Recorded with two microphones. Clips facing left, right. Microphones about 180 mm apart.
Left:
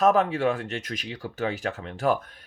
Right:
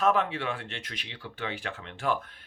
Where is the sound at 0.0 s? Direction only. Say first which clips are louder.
Left 6 dB; 40° left (ahead or behind).